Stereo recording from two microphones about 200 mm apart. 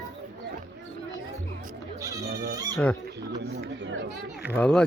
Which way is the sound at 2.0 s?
15° right (ahead or behind).